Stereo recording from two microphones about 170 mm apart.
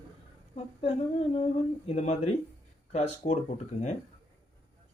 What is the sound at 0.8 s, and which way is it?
Speech, 35° left (ahead or behind).